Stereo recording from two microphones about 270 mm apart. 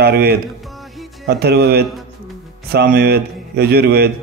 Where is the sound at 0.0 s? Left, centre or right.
Right.